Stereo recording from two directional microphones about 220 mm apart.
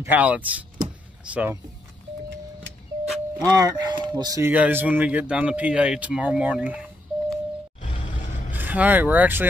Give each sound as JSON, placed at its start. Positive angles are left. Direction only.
{"t": 0.1, "sound": "speech", "side_deg": -5}
{"t": 3.3, "sound": "speech", "side_deg": -15}
{"t": 7.8, "sound": "music", "side_deg": 35}
{"t": 8.5, "sound": "speech", "side_deg": -10}